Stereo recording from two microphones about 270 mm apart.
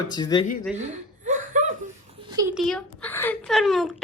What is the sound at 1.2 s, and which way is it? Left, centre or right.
Laughter, right.